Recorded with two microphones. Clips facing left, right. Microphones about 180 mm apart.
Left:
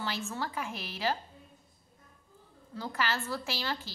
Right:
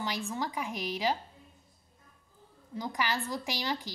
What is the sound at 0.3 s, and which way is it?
Speech, 15° right (ahead or behind).